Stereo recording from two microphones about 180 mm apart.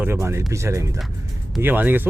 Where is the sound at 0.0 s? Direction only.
15° right (ahead or behind).